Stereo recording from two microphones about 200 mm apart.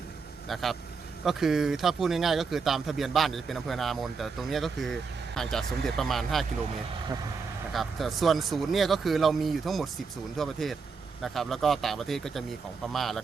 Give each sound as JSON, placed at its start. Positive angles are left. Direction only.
{"t": 0.4, "sound": "speech", "side_deg": 0}
{"t": 7.7, "sound": "speech", "side_deg": 0}